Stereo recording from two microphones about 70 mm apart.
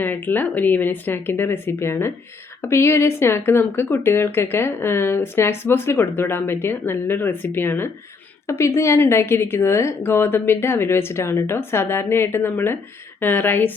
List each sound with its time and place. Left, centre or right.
0.0 s a woman's voice: left
8.4 s a woman's voice: left